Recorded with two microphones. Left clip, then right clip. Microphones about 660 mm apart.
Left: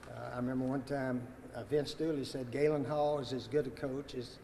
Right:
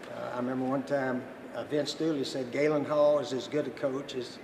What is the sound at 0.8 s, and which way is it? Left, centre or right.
Speech, left.